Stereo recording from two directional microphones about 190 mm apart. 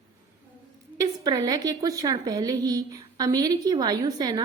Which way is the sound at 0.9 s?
20° right (ahead or behind).